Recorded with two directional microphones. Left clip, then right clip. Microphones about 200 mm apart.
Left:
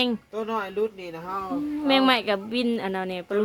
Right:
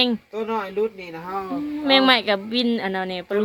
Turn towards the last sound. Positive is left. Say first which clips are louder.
# right 3 dB
turn(degrees=5)  # may be behind; listen again after turning